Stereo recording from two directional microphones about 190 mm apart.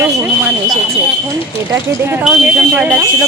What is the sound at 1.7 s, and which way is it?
Speech, 15° right (ahead or behind).